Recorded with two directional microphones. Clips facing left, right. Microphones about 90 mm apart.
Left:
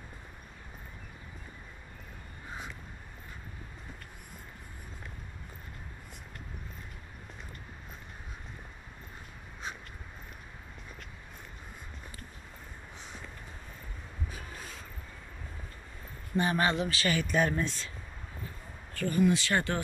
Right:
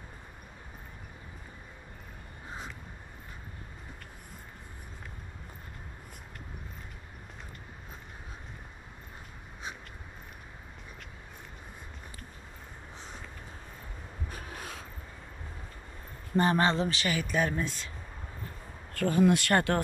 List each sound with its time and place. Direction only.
14.3 s a sound: 65° right (ahead or behind)
16.3 s speech: 40° right (ahead or behind)
16.6 s speech: 30° right (ahead or behind)
17.0 s speech: 5° right (ahead or behind)
18.9 s speech: 70° right (ahead or behind)